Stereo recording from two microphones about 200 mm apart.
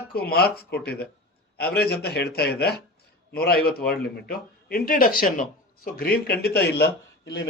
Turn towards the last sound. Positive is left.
turn(degrees=55)  # may be behind; listen again after turning